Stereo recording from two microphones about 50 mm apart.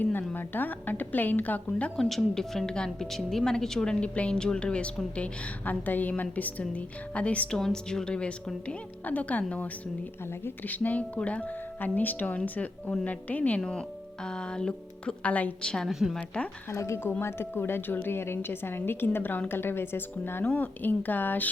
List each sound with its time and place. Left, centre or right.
0.0 s speech: left
2.0 s a woman's voice: centre
3.1 s a woman's voice: centre
4.0 s a woman's voice: left
5.8 s speech: left
7.5 s a woman's voice: centre; by 9.4 s left
10.4 s speech: left
13.6 s a woman's voice: centre
15.6 s a woman's voice: centre
15.9 s a woman's voice: centre
16.1 s a woman's voice: left
16.6 s speech: left
17.1 s a woman's voice: left